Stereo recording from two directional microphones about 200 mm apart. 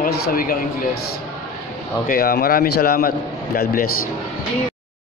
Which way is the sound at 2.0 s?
50° left (ahead or behind).